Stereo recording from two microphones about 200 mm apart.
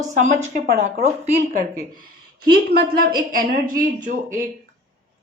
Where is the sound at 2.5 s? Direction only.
50° right (ahead or behind).